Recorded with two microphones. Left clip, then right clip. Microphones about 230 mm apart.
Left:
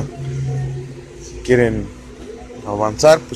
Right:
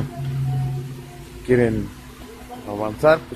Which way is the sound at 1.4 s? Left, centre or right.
Centre.